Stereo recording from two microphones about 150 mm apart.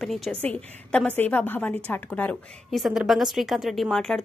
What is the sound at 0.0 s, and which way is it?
A woman's voice, centre (ahead or behind).